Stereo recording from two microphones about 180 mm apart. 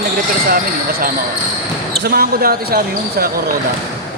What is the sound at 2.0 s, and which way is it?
Speech, 55° right (ahead or behind).